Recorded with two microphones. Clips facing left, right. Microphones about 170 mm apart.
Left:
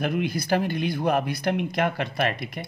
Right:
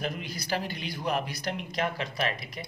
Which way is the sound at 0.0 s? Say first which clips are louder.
Left 9 dB; 60° left (ahead or behind).